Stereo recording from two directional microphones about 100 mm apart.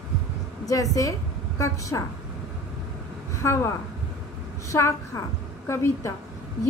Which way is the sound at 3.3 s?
30° left (ahead or behind).